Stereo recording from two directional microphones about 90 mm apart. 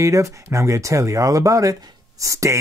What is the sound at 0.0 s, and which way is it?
Speech, 35° right (ahead or behind).